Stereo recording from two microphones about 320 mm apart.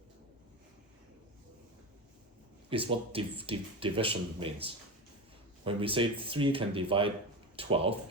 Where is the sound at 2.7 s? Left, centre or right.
Centre.